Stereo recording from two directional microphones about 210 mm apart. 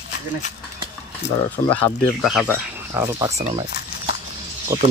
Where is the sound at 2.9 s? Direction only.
15° right (ahead or behind).